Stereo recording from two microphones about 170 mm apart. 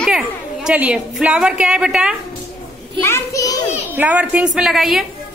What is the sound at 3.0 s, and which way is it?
Speech, 15° left (ahead or behind).